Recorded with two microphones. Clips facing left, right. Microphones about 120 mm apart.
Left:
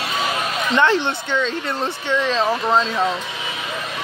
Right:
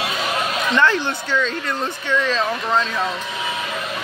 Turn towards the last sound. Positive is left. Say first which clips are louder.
# left 2 dB
turn(degrees=25)  # may be behind; listen again after turning